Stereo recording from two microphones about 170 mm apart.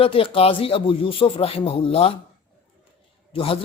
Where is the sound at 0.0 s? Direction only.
35° left (ahead or behind).